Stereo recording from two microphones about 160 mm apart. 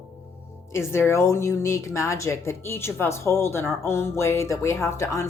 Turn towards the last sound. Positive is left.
turn(degrees=15)  # may be behind; listen again after turning